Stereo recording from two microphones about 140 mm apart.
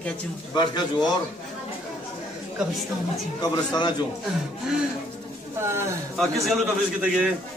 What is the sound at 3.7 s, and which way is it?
Speech, 30° left (ahead or behind).